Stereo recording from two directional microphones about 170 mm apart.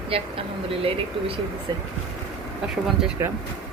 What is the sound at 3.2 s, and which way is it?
Speech, 15° right (ahead or behind).